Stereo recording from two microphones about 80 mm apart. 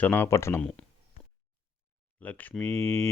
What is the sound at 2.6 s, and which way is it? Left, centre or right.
Speech, left.